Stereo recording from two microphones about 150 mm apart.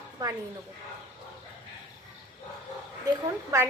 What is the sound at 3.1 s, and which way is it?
Speech, 20° right (ahead or behind).